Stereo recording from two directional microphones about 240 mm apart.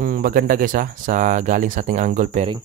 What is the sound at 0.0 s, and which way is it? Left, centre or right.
Speech, right.